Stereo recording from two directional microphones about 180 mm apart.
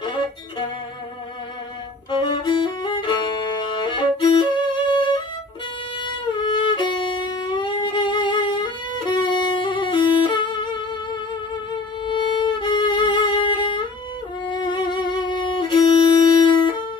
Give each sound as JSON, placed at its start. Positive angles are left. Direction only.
{"t": 0.0, "sound": "music", "side_deg": 25}
{"t": 2.0, "sound": "violin", "side_deg": 25}
{"t": 6.0, "sound": "music", "side_deg": 25}
{"t": 12.1, "sound": "music", "side_deg": 25}
{"t": 16.1, "sound": "wind instrument", "side_deg": -45}